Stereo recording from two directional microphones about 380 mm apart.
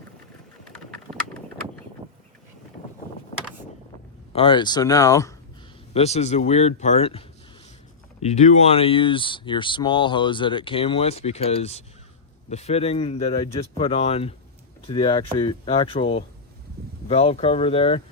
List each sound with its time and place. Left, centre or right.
1.1 s clip-clop: centre
4.3 s speech: centre